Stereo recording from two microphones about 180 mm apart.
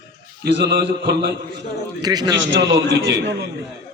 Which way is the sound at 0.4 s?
90° right.